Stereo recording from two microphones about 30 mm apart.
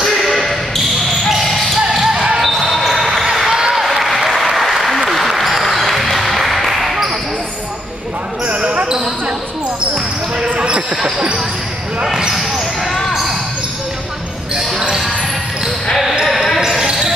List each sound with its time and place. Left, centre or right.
0.2 s basketball bounce: centre
2.0 s basketball bounce: centre
3.4 s applause: right
3.8 s applause: centre
6.1 s basketball bounce: centre
8.8 s basketball bounce: right
11.0 s basketball bounce: centre
12.4 s basketball bounce: centre
14.5 s basketball bounce: right
16.3 s basketball bounce: centre